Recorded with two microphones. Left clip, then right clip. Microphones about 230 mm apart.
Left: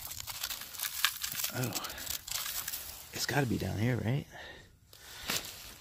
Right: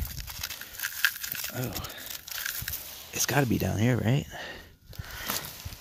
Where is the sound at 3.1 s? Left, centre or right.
Centre.